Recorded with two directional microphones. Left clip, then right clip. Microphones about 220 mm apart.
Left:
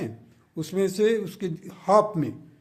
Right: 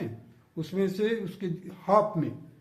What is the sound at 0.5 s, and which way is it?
A man's voice, 55° left (ahead or behind).